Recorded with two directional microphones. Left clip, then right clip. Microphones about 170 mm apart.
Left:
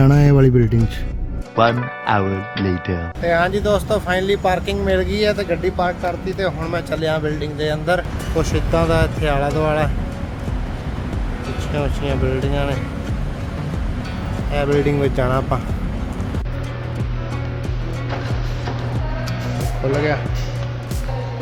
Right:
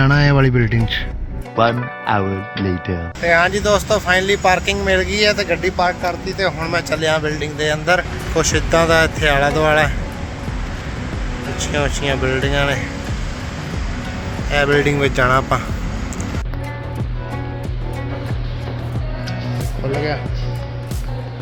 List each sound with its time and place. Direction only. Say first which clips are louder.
0.0 s speech: even; 20° left (ahead or behind)
1.5 s speech: even; centre (ahead or behind)
11.6 s speech: right 5 dB; centre (ahead or behind)
14.5 s speech: right 3 dB; 5° left (ahead or behind)